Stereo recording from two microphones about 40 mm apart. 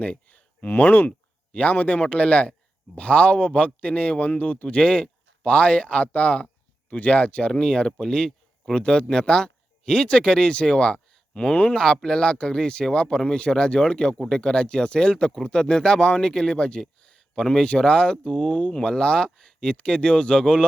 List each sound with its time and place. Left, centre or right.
0.0 s a sound: left
0.8 s speech: left
1.5 s a man's voice: left
11.7 s a man's voice: centre